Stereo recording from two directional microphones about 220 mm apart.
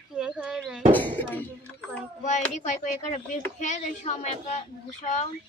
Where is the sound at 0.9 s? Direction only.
10° left (ahead or behind).